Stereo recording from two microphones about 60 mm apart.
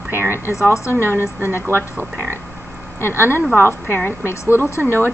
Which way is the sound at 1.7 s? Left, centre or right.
Right.